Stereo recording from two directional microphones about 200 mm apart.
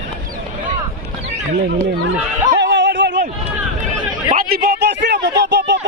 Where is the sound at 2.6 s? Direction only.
60° right (ahead or behind).